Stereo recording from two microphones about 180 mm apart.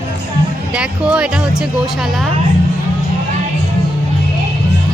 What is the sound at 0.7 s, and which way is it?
Music, 5° right (ahead or behind).